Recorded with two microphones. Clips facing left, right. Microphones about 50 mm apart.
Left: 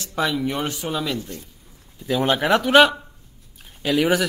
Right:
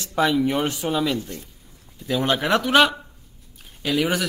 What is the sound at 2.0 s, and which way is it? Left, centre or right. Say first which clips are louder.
Speech: left 2 dB; centre.